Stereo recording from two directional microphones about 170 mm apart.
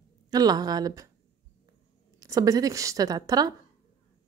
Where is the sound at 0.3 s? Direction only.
20° right (ahead or behind).